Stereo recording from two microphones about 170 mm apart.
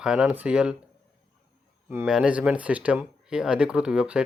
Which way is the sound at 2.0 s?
5° right (ahead or behind).